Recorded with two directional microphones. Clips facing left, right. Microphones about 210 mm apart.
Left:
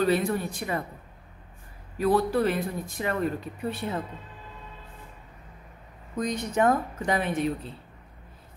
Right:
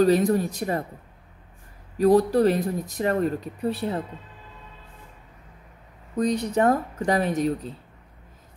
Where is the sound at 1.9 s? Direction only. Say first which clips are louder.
Right 5 dB; 40° right (ahead or behind).